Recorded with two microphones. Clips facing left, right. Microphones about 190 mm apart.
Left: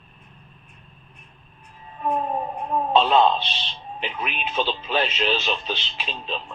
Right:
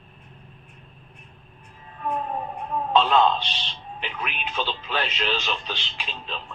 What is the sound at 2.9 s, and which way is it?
A man's voice, 20° left (ahead or behind).